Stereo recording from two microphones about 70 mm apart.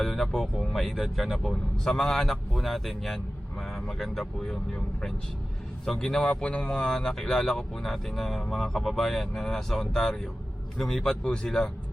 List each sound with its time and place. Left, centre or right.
0.0 s speech: centre
6.7 s speech: centre